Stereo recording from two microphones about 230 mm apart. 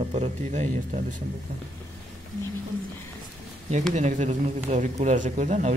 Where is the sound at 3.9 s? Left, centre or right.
Right.